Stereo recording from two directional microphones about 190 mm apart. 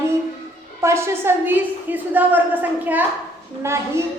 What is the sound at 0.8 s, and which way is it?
A woman's voice, 15° right (ahead or behind).